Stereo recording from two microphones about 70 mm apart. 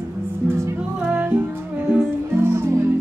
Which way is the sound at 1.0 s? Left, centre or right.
Right.